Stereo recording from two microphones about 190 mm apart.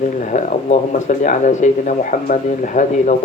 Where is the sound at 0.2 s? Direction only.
40° left (ahead or behind).